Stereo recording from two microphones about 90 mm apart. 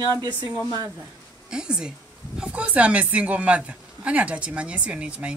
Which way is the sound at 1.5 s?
10° right (ahead or behind).